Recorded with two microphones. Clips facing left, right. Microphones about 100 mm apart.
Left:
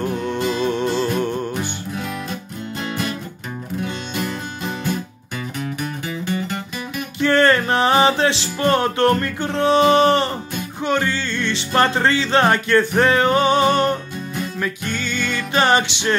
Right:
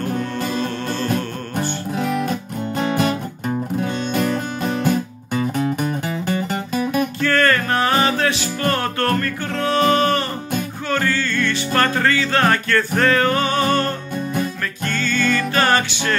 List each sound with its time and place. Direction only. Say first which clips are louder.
0.6 s music: left 4 dB; 20° left (ahead or behind)
2.0 s music: right 8 dB; 45° right (ahead or behind)
7.2 s music: left 5 dB; 20° left (ahead or behind)